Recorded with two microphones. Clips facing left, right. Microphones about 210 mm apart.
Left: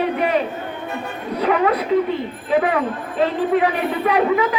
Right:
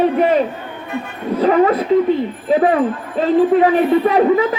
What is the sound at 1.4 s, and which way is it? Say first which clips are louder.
A man's voice: right 5 dB; 40° right (ahead or behind).